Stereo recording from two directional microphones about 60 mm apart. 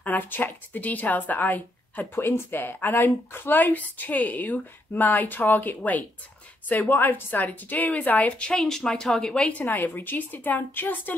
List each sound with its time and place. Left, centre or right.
0.0 s speech: left
2.1 s speech: left
8.5 s speech: centre
10.0 s speech: left